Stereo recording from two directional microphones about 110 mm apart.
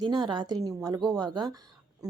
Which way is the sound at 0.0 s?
45° right (ahead or behind).